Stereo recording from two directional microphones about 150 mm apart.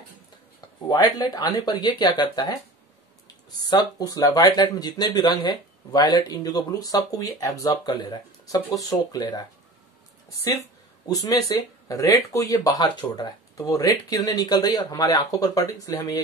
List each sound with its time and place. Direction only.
0.7 s speech: 25° left (ahead or behind)
11.1 s speech: 25° left (ahead or behind)